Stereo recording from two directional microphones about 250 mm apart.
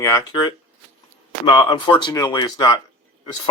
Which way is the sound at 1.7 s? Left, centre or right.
Centre.